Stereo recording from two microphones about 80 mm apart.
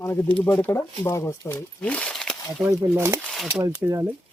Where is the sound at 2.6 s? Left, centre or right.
Centre.